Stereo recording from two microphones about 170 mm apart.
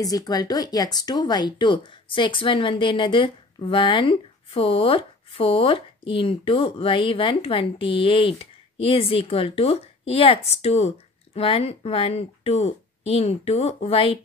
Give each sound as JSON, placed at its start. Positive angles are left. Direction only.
{"t": 0.0, "sound": "speech", "side_deg": 20}